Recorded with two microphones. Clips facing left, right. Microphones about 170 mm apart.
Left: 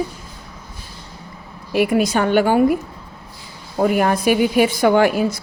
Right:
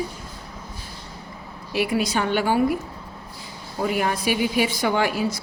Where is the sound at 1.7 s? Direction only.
50° left (ahead or behind).